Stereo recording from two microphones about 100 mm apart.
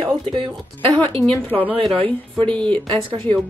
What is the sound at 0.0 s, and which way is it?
Music, 60° right (ahead or behind).